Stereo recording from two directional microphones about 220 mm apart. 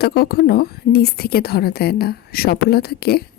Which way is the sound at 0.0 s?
45° left (ahead or behind).